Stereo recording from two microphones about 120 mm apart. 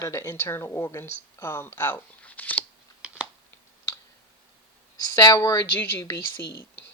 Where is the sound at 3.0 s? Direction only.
10° right (ahead or behind).